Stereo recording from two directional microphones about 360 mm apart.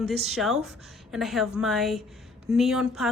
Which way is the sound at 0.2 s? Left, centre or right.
Centre.